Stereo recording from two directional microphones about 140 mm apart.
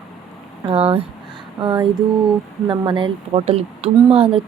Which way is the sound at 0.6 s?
40° right (ahead or behind).